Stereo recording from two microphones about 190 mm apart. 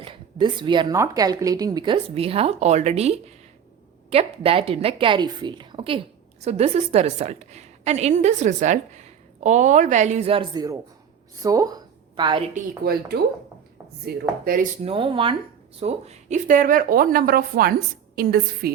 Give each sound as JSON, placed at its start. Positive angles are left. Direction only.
{"t": 0.0, "sound": "a woman's voice", "side_deg": -25}
{"t": 11.4, "sound": "a sound", "side_deg": -20}
{"t": 12.5, "sound": "speech", "side_deg": -55}
{"t": 14.8, "sound": "a woman's voice", "side_deg": -30}